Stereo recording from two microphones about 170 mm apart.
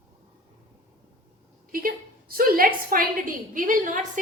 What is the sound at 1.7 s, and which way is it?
A woman's voice, 60° right (ahead or behind).